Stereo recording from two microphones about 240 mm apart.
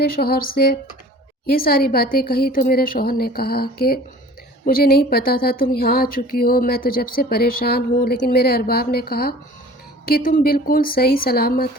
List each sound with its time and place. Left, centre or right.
0.0 s speech: left